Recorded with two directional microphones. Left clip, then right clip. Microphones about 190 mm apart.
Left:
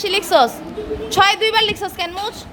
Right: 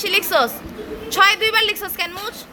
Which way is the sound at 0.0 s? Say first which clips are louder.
Left 3 dB; 5° left (ahead or behind).